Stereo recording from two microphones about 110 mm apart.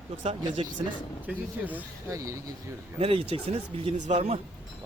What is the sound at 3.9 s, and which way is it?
Speech, 85° right.